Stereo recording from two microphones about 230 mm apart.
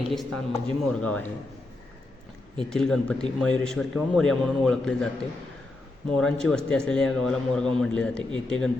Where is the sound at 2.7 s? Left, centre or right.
Centre.